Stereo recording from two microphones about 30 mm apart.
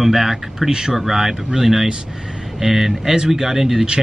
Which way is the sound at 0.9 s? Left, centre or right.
Centre.